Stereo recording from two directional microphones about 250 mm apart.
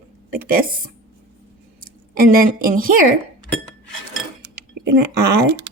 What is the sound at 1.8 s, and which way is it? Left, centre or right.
A woman's voice, right.